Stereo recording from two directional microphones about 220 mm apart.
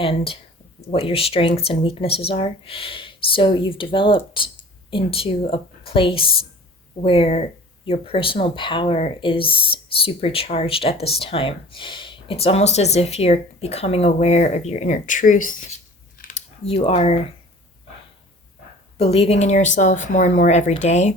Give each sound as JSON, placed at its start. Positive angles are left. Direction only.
{"t": 0.0, "sound": "speech", "side_deg": 25}
{"t": 16.1, "sound": "a sound", "side_deg": 35}
{"t": 18.9, "sound": "speech", "side_deg": 25}